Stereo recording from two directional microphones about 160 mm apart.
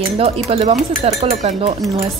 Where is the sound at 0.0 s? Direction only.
40° right (ahead or behind).